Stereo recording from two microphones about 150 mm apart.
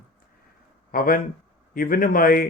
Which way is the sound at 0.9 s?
75° left (ahead or behind).